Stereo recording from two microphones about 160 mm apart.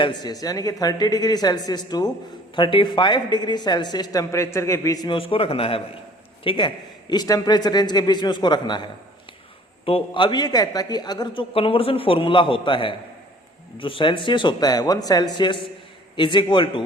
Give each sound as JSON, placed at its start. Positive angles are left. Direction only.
{"t": 0.0, "sound": "a woman's voice", "side_deg": 25}